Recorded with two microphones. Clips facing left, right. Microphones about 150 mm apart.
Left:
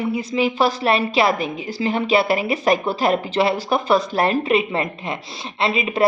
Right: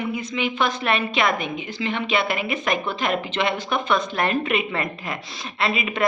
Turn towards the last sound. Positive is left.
turn(degrees=30)  # may be behind; listen again after turning